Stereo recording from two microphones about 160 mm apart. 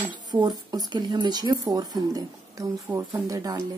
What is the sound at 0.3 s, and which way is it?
Speech, 25° right (ahead or behind).